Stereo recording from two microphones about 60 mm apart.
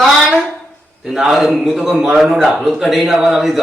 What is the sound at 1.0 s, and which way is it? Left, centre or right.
A man's voice, centre.